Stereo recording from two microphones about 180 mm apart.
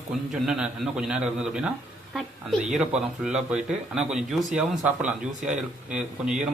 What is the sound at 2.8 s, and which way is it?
A man's voice, 5° right (ahead or behind).